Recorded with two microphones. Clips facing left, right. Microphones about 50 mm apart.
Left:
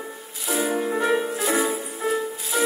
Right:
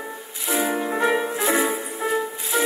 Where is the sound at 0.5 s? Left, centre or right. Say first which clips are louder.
Right 1 dB; right.